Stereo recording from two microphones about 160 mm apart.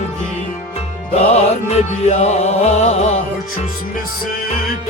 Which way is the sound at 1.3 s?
45° left (ahead or behind).